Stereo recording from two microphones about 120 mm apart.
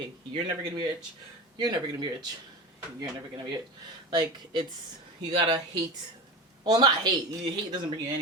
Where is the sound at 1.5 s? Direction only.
40° right (ahead or behind).